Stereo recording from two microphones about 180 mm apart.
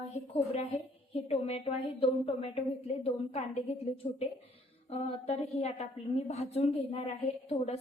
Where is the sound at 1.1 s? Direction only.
35° left (ahead or behind).